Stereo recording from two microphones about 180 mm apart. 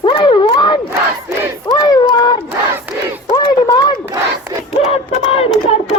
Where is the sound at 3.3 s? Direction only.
25° left (ahead or behind).